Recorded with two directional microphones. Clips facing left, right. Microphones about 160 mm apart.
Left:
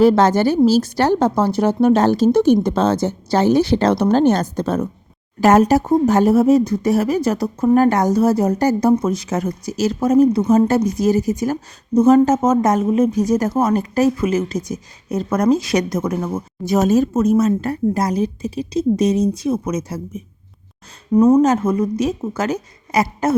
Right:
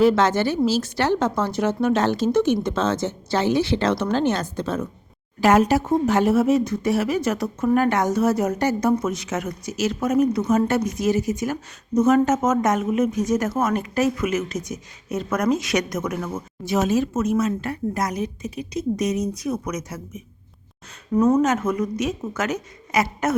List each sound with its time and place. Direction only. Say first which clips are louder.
0.0 s speech: left 5 dB; 40° left (ahead or behind)
21.1 s speech: left 6 dB; 20° left (ahead or behind)
21.4 s speech: left 5 dB; 30° left (ahead or behind)